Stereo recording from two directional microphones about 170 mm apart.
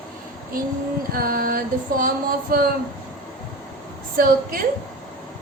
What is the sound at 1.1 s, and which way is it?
A woman's voice, 60° right (ahead or behind).